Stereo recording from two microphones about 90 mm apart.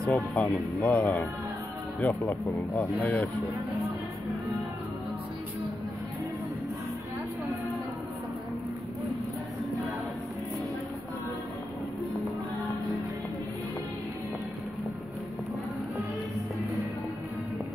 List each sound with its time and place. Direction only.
0.0 s speech: 10° left (ahead or behind)